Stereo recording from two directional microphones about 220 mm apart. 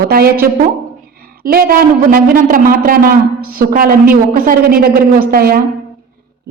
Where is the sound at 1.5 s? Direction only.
40° right (ahead or behind).